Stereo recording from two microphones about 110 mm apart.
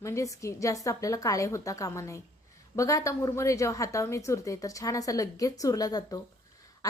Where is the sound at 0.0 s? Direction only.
30° left (ahead or behind).